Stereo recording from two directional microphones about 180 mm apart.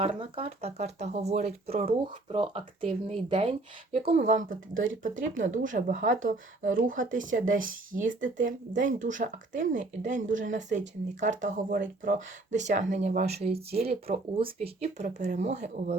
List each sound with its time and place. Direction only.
0.0 s speech: 35° right (ahead or behind)
4.4 s speech: 90° right
5.3 s speech: 45° right (ahead or behind)
15.0 s speech: 45° right (ahead or behind)